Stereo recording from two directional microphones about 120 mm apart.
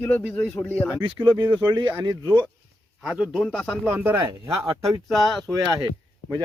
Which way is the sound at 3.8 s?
15° right (ahead or behind).